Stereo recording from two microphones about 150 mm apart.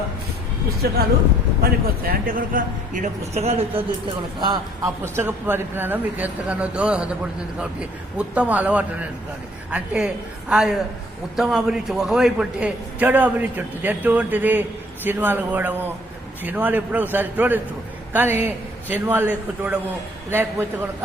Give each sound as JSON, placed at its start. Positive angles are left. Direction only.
{"t": 0.8, "sound": "speech", "side_deg": -90}
{"t": 1.6, "sound": "a man's voice", "side_deg": -70}
{"t": 4.4, "sound": "a man's voice", "side_deg": -30}
{"t": 5.1, "sound": "a man's voice", "side_deg": -15}